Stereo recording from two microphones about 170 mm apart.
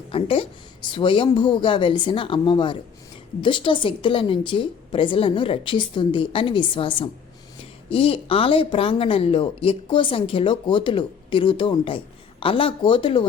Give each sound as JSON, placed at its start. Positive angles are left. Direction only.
{"t": 0.1, "sound": "a woman's voice", "side_deg": 30}